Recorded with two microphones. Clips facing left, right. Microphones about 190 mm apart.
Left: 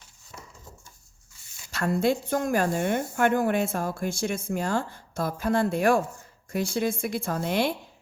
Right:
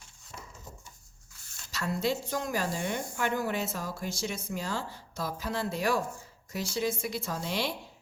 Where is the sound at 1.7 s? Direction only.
55° left (ahead or behind).